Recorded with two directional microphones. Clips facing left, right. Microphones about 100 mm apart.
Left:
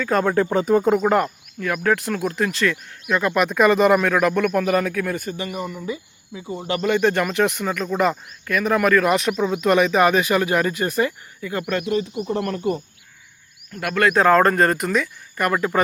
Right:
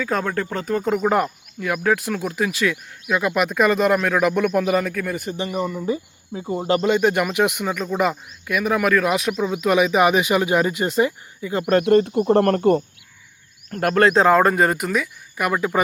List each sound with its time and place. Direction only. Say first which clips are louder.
0.0 s speech: left 4 dB; centre (ahead or behind)
0.9 s speech: left 1 dB; 5° right (ahead or behind)
4.8 s speech: left 1 dB; centre (ahead or behind)
5.2 s speech: right 3 dB; 25° right (ahead or behind)
6.8 s speech: left 3 dB; 15° right (ahead or behind)
11.8 s speech: right 7 dB; 60° right (ahead or behind)
13.8 s speech: right 2 dB; 35° right (ahead or behind); by 15.8 s 5° right (ahead or behind)